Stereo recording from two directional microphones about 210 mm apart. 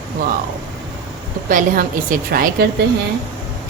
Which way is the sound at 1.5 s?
40° right (ahead or behind).